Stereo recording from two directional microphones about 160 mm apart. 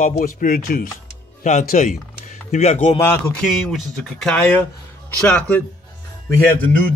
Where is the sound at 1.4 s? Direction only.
50° left (ahead or behind).